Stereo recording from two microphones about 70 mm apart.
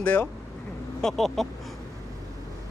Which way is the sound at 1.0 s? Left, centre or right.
Centre.